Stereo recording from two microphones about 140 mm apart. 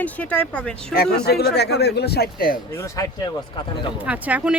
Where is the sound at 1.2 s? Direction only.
90° left.